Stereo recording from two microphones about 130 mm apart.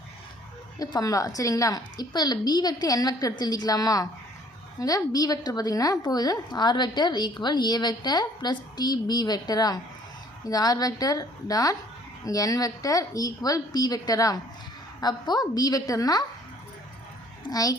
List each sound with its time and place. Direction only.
0.8 s a woman's voice: 30° left (ahead or behind)
17.5 s a woman's voice: 30° left (ahead or behind)